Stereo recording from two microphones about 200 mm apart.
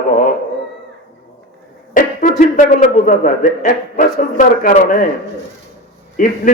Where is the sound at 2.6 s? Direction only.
40° left (ahead or behind).